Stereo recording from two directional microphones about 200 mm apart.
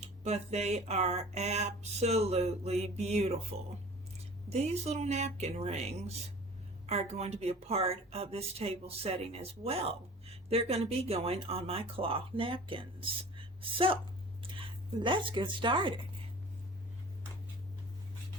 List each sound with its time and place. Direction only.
0.0 s speech: 35° right (ahead or behind)
4.4 s speech: 30° right (ahead or behind)